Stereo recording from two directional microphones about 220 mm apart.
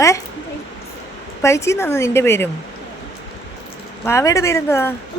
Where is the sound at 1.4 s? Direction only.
15° left (ahead or behind).